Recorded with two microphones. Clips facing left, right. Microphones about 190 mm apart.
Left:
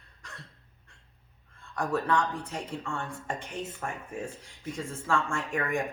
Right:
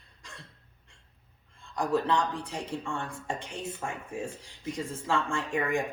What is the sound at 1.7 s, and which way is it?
Speech, 15° right (ahead or behind).